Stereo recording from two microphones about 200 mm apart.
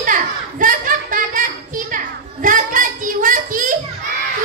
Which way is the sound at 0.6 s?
40° right (ahead or behind).